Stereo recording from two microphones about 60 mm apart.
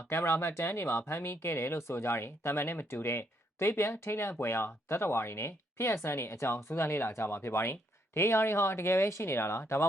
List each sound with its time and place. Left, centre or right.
0.1 s speech: left